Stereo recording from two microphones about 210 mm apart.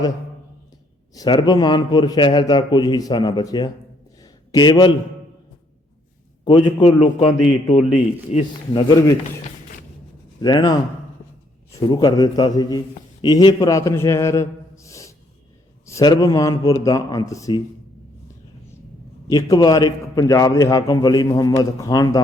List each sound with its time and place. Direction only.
1.1 s a man's voice: 20° left (ahead or behind)
4.2 s a sound: 20° left (ahead or behind)
6.4 s a man's voice: 20° left (ahead or behind)
10.4 s a man's voice: 20° left (ahead or behind)
11.9 s a man's voice: 20° left (ahead or behind)
19.3 s a man's voice: 15° left (ahead or behind)